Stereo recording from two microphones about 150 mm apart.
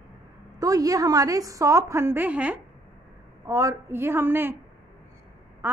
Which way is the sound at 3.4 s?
20° right (ahead or behind).